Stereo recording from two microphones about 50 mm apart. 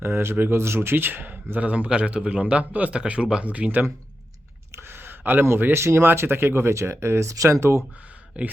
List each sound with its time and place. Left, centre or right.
0.0 s speech: right
1.5 s a man's voice: right
3.4 s a man's voice: right
4.7 s a sound: right
5.5 s speech: right
5.8 s speech: right
7.6 s speech: right
8.4 s a man's voice: right